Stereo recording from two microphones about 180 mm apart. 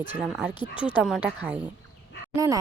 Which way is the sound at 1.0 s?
5° right (ahead or behind).